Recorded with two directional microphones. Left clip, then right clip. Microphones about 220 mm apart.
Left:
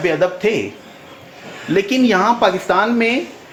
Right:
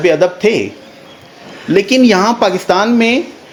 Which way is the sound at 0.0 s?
45° right (ahead or behind).